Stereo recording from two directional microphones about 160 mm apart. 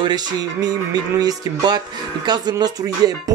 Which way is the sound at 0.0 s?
25° right (ahead or behind).